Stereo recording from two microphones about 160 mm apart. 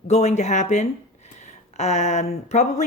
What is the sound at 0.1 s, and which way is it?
Speech, 45° left (ahead or behind).